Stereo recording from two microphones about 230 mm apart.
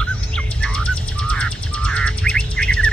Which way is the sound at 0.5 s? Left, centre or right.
Centre.